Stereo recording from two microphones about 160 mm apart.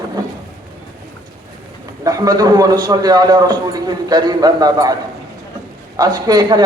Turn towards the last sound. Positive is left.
turn(degrees=-25)  # may be behind; listen again after turning